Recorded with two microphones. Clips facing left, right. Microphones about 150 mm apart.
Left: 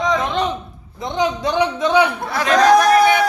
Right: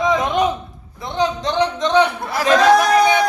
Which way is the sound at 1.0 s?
15° left (ahead or behind).